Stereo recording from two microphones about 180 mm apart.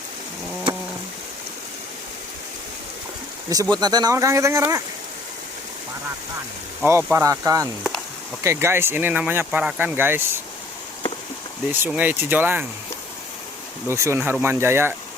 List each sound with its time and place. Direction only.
3.5 s speech: 20° right (ahead or behind)
6.8 s speech: 15° right (ahead or behind)
11.7 s speech: 10° right (ahead or behind)
13.8 s speech: 15° right (ahead or behind)